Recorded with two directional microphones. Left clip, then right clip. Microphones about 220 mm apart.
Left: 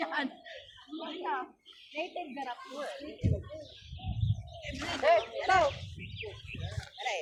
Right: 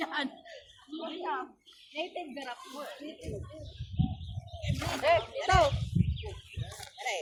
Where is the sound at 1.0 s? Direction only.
40° right (ahead or behind).